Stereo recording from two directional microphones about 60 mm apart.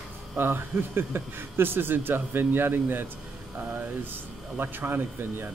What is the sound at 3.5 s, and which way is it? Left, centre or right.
A man's voice, right.